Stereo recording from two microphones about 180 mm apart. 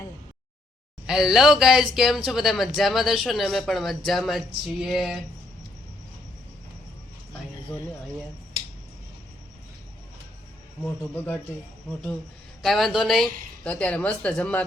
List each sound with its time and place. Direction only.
1.0 s speech: 5° right (ahead or behind)
11.0 s speech: 10° left (ahead or behind)
12.6 s speech: centre (ahead or behind)